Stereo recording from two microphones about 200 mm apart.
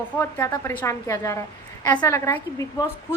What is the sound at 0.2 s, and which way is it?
A woman's voice, 10° left (ahead or behind).